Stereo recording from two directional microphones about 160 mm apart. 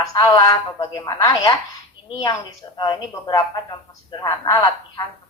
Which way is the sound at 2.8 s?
25° left (ahead or behind).